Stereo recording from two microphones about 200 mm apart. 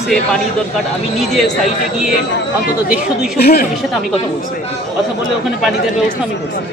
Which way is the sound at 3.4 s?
50° left (ahead or behind).